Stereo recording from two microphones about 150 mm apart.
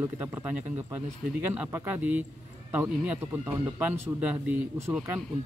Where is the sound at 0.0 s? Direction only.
15° right (ahead or behind).